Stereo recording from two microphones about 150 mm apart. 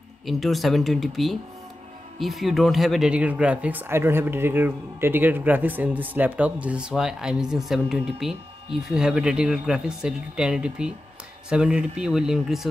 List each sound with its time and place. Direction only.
0.3 s speech: centre (ahead or behind)